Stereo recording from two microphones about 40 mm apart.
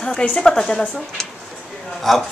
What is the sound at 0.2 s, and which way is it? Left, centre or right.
Speech, left.